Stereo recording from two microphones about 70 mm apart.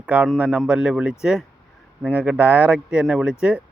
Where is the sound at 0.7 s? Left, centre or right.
Centre.